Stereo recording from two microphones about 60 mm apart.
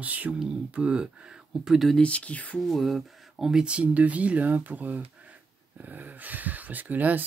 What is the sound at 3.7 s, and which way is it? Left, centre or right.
Speech, right.